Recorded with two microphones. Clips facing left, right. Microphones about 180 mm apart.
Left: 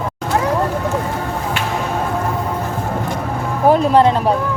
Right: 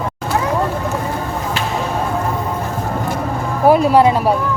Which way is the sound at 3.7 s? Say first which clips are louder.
Right 1 dB; 10° right (ahead or behind).